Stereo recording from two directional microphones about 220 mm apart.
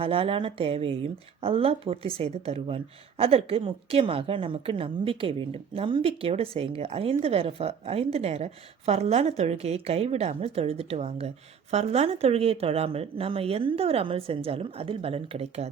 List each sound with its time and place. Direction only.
0.0 s speech: 25° right (ahead or behind)